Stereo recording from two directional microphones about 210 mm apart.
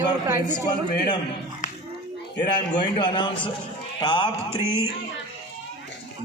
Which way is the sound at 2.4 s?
20° left (ahead or behind).